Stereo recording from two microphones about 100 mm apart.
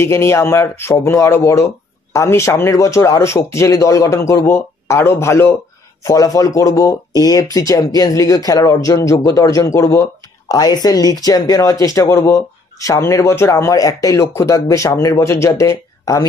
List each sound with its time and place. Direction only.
0.0 s a man's voice: 30° left (ahead or behind)